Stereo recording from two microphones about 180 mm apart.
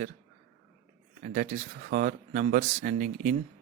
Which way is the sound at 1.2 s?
45° right (ahead or behind).